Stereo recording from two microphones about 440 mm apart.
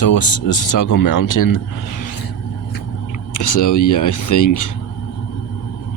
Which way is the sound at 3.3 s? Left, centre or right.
Left.